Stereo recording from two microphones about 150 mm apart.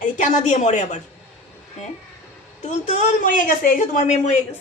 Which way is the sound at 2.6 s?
50° left (ahead or behind).